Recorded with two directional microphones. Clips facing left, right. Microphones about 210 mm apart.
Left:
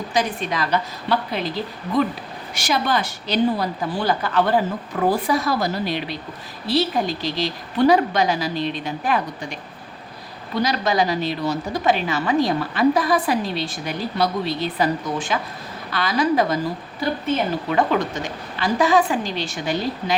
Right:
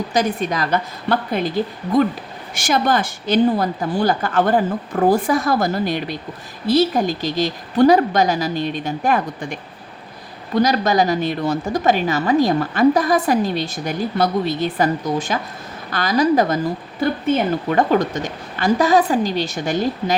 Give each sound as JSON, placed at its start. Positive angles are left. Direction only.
{"t": 0.1, "sound": "a woman's voice", "side_deg": -45}
{"t": 17.7, "sound": "a woman's voice", "side_deg": -40}